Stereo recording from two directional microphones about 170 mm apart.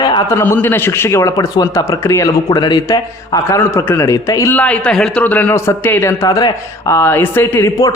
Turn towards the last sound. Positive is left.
turn(degrees=20)  # may be behind; listen again after turning